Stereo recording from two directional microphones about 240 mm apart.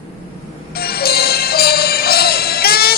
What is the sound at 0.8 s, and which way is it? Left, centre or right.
Music, left.